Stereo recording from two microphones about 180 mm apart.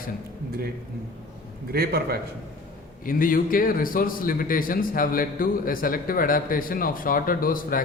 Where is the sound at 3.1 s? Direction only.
50° left (ahead or behind).